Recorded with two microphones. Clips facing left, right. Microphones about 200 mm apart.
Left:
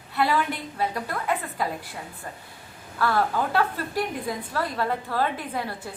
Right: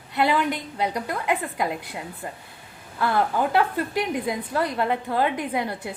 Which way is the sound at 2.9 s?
20° right (ahead or behind).